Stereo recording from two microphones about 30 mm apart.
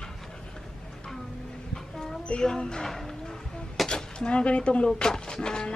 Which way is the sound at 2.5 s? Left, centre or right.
Left.